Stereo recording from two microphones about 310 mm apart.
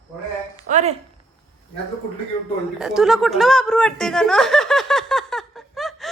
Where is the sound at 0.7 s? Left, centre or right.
Right.